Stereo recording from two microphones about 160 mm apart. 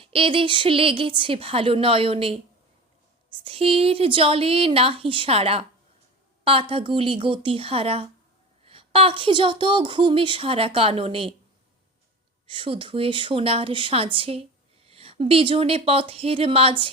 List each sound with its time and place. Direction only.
0.0 s a woman's voice: 35° right (ahead or behind)
3.4 s a woman's voice: 35° right (ahead or behind)
12.5 s a woman's voice: 35° right (ahead or behind)